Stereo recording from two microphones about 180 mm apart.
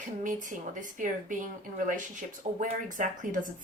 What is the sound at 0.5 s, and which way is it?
Speech, 45° right (ahead or behind).